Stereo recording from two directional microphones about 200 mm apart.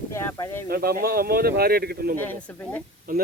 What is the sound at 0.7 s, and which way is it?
Speech, 50° right (ahead or behind).